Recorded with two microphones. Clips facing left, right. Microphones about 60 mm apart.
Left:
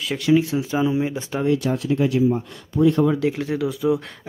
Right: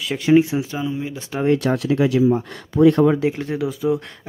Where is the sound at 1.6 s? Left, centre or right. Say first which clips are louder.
Right 2 dB; right.